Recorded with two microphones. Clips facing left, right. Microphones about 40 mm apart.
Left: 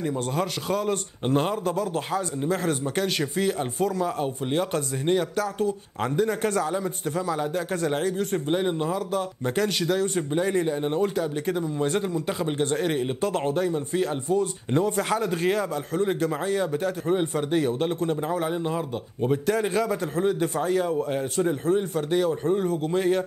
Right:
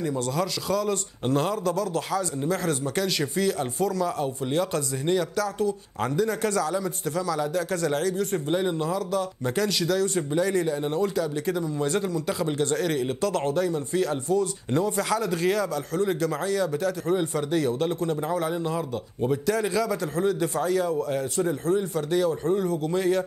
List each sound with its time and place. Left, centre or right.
0.0 s a man's voice: left
19.4 s a man's voice: left